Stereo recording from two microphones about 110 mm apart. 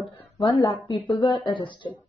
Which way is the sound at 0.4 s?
50° left (ahead or behind).